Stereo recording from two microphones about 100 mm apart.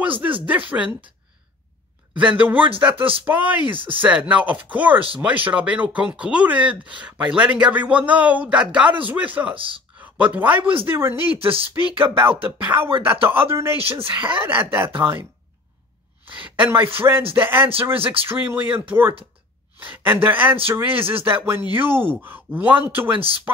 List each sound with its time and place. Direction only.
0.0 s speech: 15° right (ahead or behind)
2.1 s speech: 15° right (ahead or behind)
3.7 s speech: 60° right (ahead or behind)
4.0 s speech: 15° right (ahead or behind)
9.6 s speech: 60° right (ahead or behind)
9.9 s speech: 15° right (ahead or behind)
10.6 s speech: 65° right (ahead or behind)
10.9 s speech: 25° right (ahead or behind)
11.3 s speech: 70° right (ahead or behind)
12.0 s speech: 20° right (ahead or behind)
13.7 s speech: 70° right (ahead or behind)
14.3 s speech: 20° right (ahead or behind)
16.3 s a woman's voice: 15° right (ahead or behind)
23.1 s speech: 65° right (ahead or behind)